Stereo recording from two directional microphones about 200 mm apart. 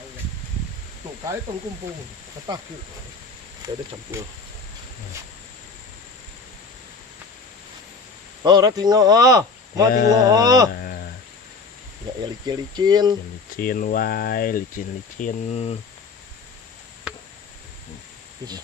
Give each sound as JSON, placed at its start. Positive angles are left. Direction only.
{"t": 2.5, "sound": "speech", "side_deg": -20}
{"t": 3.6, "sound": "speech", "side_deg": -20}
{"t": 8.4, "sound": "speech", "side_deg": -20}
{"t": 9.9, "sound": "speech", "side_deg": 50}
{"t": 10.2, "sound": "speech", "side_deg": -20}
{"t": 10.7, "sound": "a sound", "side_deg": 50}
{"t": 12.5, "sound": "speech", "side_deg": -20}
{"t": 13.6, "sound": "speech", "side_deg": 45}